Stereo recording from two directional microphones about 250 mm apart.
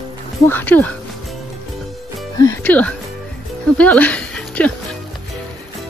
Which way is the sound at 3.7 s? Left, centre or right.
Centre.